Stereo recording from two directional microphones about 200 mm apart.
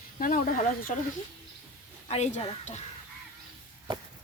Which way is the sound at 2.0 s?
35° left (ahead or behind).